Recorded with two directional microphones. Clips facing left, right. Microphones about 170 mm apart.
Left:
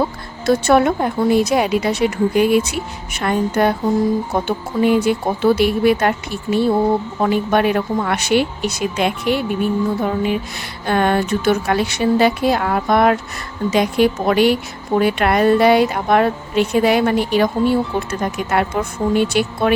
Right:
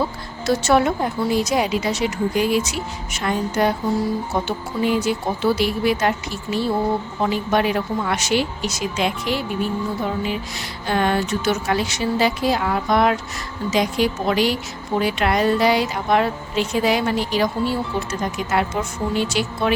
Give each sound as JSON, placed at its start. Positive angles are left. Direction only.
{"t": 0.4, "sound": "a woman's voice", "side_deg": 55}
{"t": 10.8, "sound": "a woman's voice", "side_deg": 55}